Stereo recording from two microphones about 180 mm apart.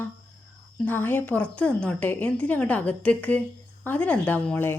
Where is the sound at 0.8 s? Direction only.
10° left (ahead or behind).